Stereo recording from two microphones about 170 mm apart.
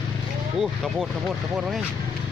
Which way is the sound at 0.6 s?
Centre (ahead or behind).